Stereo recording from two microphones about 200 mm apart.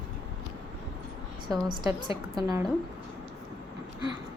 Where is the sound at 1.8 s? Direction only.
20° right (ahead or behind).